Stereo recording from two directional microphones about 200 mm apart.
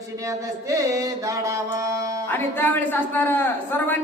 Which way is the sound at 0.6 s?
15° right (ahead or behind).